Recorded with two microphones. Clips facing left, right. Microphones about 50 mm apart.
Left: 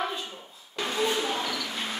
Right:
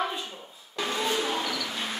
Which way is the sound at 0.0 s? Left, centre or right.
Centre.